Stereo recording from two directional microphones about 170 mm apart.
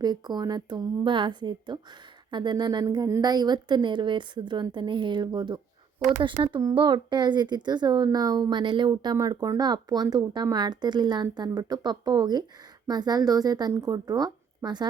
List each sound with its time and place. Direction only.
0.0 s speech: 25° right (ahead or behind)